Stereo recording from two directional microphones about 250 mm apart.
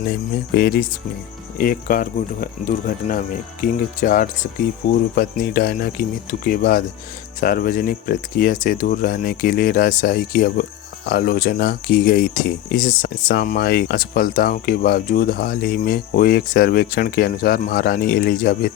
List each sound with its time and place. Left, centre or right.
0.5 s speech: left